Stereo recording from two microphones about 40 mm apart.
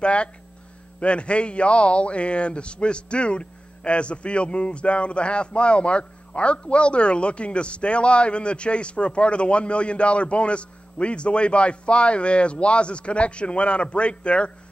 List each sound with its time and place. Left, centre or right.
0.0 s a man's voice: left